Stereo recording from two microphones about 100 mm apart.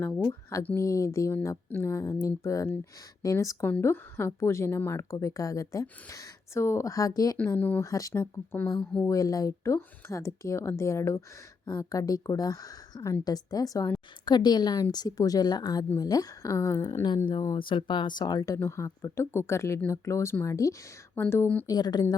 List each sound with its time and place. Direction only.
0.8 s speech: 35° left (ahead or behind)
1.3 s a woman's voice: 25° left (ahead or behind)
3.6 s a woman's voice: 20° left (ahead or behind)
7.3 s a woman's voice: 20° left (ahead or behind)
7.9 s a woman's voice: 35° left (ahead or behind)
17.7 s a woman's voice: 55° left (ahead or behind); by 21.7 s 20° left (ahead or behind)
21.7 s speech: 45° left (ahead or behind)